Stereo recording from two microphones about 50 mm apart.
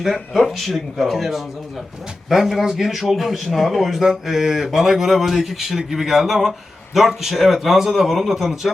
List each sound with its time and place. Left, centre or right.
0.0 s a man's voice: centre